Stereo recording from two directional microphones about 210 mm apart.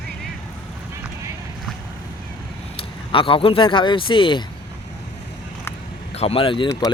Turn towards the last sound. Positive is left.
turn(degrees=20)  # may be behind; listen again after turning